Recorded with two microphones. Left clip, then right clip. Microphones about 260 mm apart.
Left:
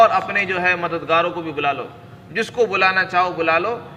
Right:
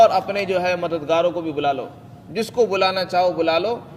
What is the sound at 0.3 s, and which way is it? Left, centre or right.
A man's voice, right.